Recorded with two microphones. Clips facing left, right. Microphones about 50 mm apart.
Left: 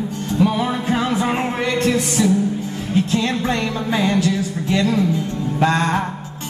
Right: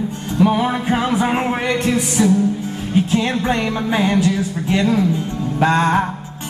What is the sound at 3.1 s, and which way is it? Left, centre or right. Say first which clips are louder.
Music: right 2 dB; centre.